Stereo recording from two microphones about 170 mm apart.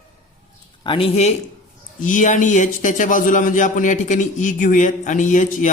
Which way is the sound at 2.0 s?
50° left (ahead or behind).